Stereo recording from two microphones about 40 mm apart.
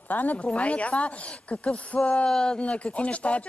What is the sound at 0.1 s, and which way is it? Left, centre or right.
Speech, left.